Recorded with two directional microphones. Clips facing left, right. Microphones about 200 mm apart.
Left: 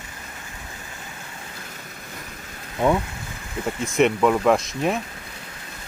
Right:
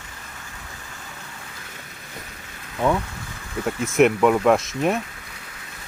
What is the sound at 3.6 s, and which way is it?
Speech, 5° right (ahead or behind).